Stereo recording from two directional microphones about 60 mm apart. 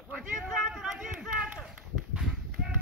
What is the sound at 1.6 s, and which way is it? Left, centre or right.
Run, centre.